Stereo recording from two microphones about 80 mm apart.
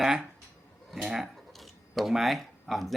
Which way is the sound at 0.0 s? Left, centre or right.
Centre.